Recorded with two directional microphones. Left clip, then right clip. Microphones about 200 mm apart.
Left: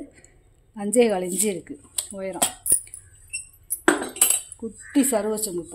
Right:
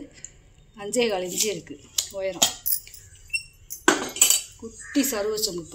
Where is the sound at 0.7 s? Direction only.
55° left (ahead or behind).